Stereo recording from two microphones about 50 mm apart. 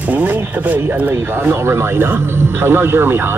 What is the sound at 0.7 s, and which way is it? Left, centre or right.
Speech, right.